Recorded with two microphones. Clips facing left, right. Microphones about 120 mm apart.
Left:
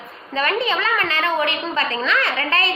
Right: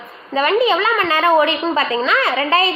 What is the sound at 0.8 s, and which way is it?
A woman's voice, 25° right (ahead or behind).